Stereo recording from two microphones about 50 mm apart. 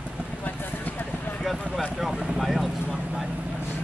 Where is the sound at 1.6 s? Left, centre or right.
Centre.